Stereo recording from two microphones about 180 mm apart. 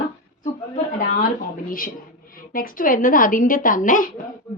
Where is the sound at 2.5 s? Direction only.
50° left (ahead or behind).